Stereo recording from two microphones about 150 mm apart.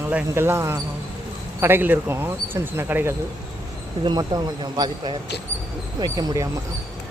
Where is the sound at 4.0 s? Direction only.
30° right (ahead or behind).